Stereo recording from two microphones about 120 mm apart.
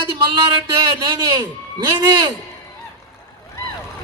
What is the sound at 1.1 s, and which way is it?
Speech, 40° right (ahead or behind).